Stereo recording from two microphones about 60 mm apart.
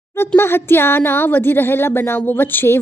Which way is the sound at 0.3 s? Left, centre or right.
Left.